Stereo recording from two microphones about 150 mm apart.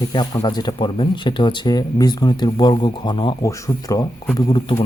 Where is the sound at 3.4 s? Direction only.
20° left (ahead or behind).